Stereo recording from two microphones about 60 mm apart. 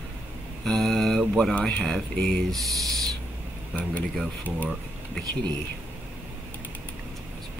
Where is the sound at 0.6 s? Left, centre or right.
Centre.